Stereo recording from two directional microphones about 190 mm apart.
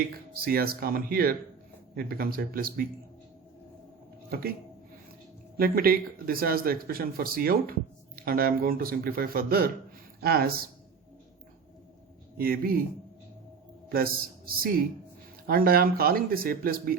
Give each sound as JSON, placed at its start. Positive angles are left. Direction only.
{"t": 0.4, "sound": "speech", "side_deg": -50}
{"t": 4.3, "sound": "speech", "side_deg": -55}
{"t": 5.5, "sound": "speech", "side_deg": -50}
{"t": 12.4, "sound": "speech", "side_deg": -50}
{"t": 13.9, "sound": "speech", "side_deg": -50}